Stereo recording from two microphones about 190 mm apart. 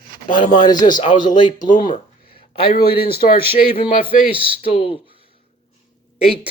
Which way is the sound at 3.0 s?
55° left (ahead or behind).